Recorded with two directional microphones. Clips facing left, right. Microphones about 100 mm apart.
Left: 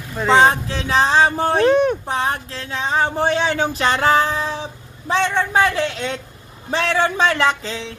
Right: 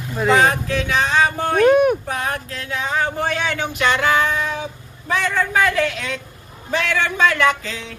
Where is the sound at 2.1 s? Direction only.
30° left (ahead or behind).